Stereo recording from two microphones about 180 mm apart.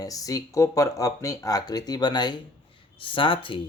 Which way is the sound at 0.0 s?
20° left (ahead or behind).